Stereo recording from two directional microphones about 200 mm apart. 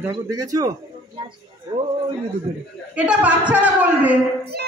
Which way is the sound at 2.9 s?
5° right (ahead or behind).